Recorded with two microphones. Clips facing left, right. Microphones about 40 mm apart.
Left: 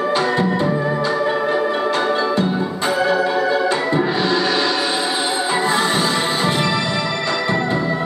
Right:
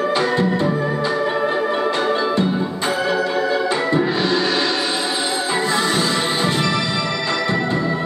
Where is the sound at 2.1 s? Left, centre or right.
Centre.